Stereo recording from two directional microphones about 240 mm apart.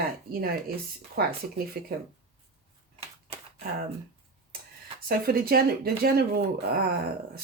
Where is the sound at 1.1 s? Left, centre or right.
Right.